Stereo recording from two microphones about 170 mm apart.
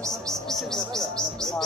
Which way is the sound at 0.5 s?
Centre (ahead or behind).